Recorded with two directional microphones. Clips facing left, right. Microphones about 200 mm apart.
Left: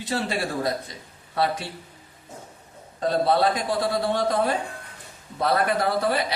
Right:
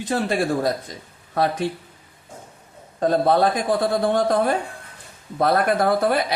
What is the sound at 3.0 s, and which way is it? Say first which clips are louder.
A woman's voice: right 3 dB; 50° right (ahead or behind).